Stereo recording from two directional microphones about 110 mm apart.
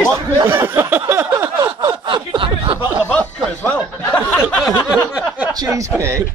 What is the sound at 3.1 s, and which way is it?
Speech, 10° left (ahead or behind).